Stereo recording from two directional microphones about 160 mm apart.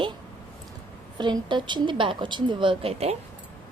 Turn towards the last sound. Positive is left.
turn(degrees=-40)  # may be behind; listen again after turning